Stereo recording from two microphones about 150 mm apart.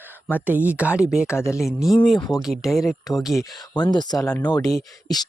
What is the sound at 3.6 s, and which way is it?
Speech, 25° left (ahead or behind).